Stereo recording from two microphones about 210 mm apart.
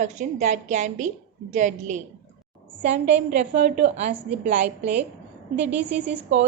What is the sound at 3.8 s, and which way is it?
Speech, 30° right (ahead or behind).